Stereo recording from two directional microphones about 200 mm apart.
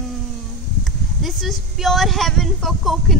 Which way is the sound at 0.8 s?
Centre (ahead or behind).